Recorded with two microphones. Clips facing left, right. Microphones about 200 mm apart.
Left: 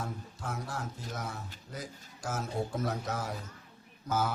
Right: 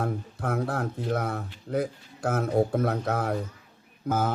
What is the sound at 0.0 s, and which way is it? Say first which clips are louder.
A man's voice: right 9 dB; 60° right (ahead or behind).